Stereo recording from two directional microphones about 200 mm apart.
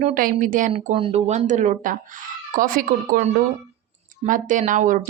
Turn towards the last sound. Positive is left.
turn(degrees=-40)  # may be behind; listen again after turning